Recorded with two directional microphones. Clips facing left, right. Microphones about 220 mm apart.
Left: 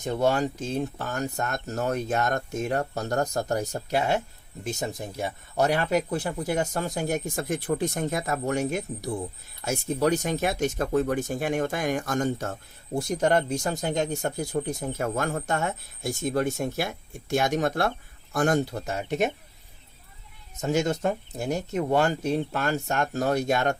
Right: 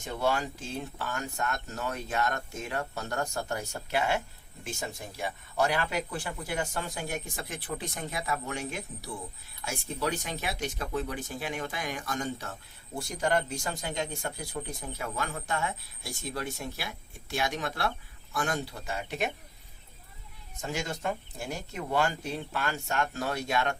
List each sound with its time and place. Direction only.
0.0 s speech: 45° left (ahead or behind)
20.6 s speech: 40° left (ahead or behind)